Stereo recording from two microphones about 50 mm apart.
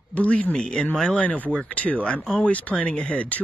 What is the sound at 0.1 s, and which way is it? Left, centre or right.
Speech, left.